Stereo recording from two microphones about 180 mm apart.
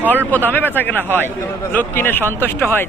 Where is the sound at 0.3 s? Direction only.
10° left (ahead or behind).